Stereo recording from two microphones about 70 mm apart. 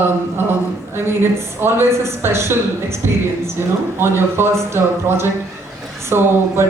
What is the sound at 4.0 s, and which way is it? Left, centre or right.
A woman's voice, right.